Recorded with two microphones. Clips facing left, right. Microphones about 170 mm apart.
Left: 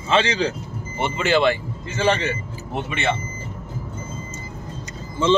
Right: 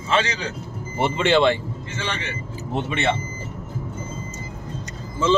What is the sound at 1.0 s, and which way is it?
Speech, 30° right (ahead or behind).